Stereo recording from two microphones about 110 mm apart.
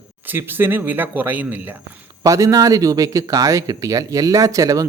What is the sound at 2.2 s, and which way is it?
Speech, 30° right (ahead or behind).